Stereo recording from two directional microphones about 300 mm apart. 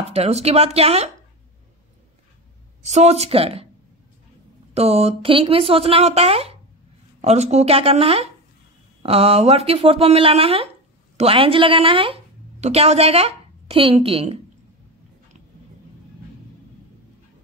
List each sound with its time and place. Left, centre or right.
0.1 s speech: right
2.8 s speech: right
4.7 s a woman's voice: centre